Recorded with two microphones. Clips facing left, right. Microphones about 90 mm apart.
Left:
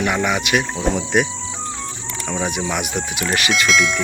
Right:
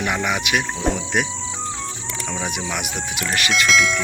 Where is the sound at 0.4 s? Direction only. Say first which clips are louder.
Left 2 dB; centre (ahead or behind).